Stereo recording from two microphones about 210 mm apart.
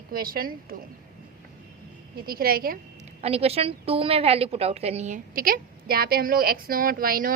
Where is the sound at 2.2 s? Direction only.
45° right (ahead or behind).